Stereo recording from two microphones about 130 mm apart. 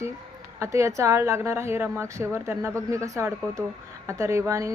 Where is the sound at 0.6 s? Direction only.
25° right (ahead or behind).